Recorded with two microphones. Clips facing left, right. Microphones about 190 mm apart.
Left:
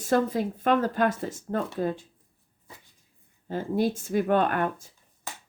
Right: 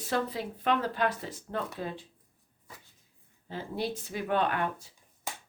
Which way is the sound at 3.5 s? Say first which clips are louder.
Left 8 dB; 50° left (ahead or behind).